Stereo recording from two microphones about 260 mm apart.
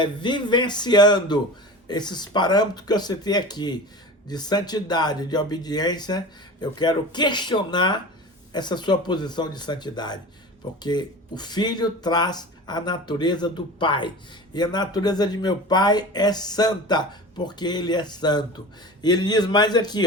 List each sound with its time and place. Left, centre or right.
0.0 s speech: centre